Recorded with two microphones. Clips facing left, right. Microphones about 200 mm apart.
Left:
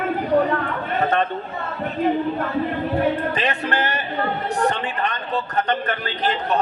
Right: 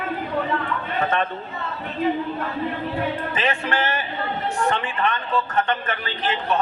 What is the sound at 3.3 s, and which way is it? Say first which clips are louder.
A man's voice: left 1 dB; 35° left (ahead or behind).